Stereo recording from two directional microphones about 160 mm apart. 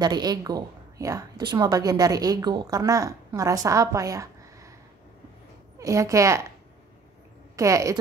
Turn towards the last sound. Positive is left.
turn(degrees=-20)  # may be behind; listen again after turning